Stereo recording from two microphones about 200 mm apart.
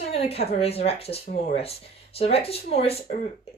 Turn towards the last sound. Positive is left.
turn(degrees=30)  # may be behind; listen again after turning